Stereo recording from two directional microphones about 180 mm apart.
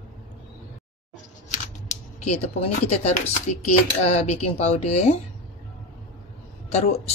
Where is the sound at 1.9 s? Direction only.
40° left (ahead or behind).